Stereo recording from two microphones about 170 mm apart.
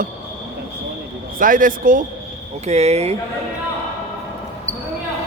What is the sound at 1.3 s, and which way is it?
Speech, 55° right (ahead or behind).